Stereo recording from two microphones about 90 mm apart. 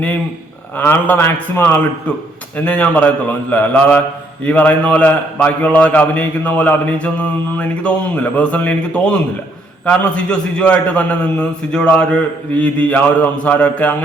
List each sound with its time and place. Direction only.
0.8 s a man's voice: 20° left (ahead or behind)